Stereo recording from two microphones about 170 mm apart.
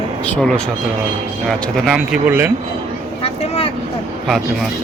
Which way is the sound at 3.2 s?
35° left (ahead or behind).